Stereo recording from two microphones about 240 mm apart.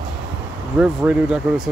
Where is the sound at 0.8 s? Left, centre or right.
Centre.